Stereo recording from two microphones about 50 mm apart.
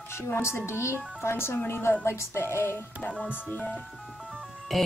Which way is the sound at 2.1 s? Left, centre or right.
Left.